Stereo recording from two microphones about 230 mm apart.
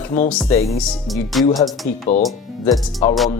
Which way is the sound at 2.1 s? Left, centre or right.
Left.